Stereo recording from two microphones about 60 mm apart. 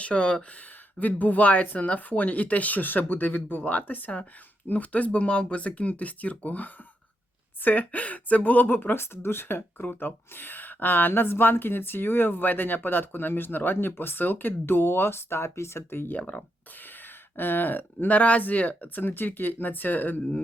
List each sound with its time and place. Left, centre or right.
0.0 s speech: centre; by 16.1 s left
16.1 s speech: left